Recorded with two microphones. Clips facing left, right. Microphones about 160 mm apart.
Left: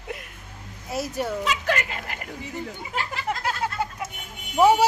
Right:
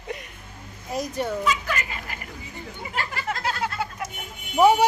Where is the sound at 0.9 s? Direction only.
5° left (ahead or behind).